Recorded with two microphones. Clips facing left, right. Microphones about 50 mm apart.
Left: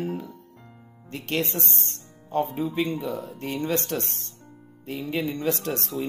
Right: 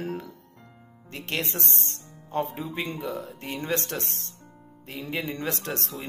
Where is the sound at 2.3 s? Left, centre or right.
Right.